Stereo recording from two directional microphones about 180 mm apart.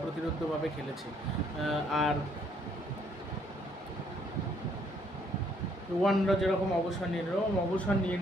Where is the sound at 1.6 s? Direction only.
Centre (ahead or behind).